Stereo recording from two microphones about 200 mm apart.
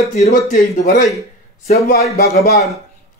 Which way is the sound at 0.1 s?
40° left (ahead or behind).